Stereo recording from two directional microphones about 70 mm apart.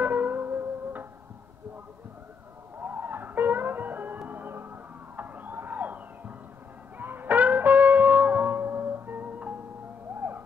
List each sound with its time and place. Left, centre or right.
0.0 s music: right
2.8 s music: right